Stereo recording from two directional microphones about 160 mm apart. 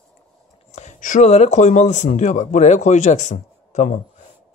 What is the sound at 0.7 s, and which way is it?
Speech, 45° left (ahead or behind).